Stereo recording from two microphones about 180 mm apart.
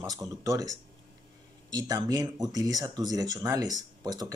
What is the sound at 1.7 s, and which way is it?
Speech, 20° right (ahead or behind).